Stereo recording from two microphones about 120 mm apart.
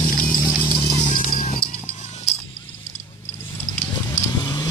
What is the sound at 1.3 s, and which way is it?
Music, 55° left (ahead or behind).